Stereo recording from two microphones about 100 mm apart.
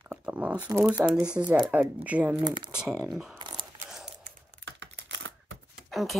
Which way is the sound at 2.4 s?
45° right (ahead or behind).